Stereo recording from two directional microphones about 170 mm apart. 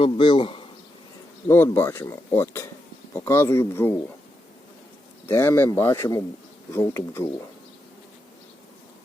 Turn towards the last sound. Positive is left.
turn(degrees=15)  # may be behind; listen again after turning